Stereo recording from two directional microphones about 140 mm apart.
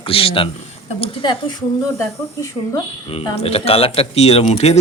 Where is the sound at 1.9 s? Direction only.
20° left (ahead or behind).